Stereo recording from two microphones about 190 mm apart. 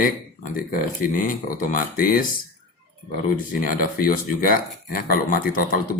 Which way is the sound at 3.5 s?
45° left (ahead or behind).